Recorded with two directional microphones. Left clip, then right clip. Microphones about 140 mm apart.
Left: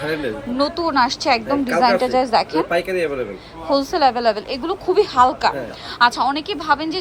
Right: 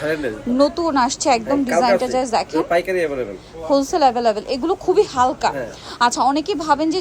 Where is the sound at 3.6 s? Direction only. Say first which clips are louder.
Right 1 dB; 30° right (ahead or behind).